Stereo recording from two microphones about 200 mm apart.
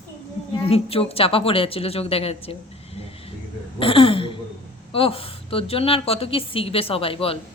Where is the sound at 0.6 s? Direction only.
30° left (ahead or behind).